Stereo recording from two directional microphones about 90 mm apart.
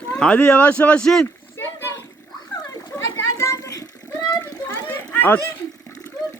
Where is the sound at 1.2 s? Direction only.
25° left (ahead or behind).